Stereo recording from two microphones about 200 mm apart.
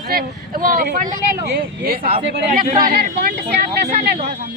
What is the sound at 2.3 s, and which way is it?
Speech, 45° right (ahead or behind).